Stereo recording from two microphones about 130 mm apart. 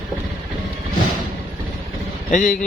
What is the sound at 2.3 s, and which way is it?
Speech, 80° left.